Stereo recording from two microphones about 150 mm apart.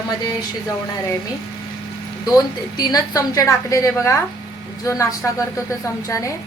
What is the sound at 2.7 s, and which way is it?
A woman's voice, 25° left (ahead or behind).